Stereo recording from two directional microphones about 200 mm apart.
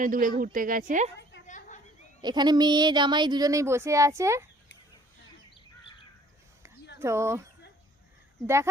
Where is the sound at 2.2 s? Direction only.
20° right (ahead or behind).